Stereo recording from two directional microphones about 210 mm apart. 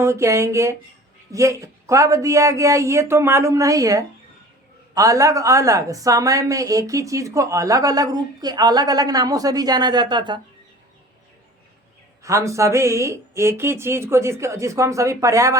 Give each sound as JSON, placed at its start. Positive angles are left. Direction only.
{"t": 0.0, "sound": "a woman's voice", "side_deg": -15}
{"t": 12.2, "sound": "a woman's voice", "side_deg": -15}